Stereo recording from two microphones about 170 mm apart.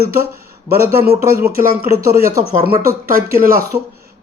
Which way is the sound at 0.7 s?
60° right (ahead or behind).